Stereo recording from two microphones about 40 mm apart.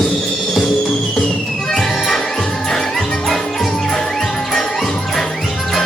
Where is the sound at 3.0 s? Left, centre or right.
Left.